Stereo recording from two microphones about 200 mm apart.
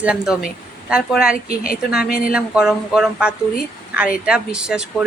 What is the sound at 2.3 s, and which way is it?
Speech, 5° right (ahead or behind).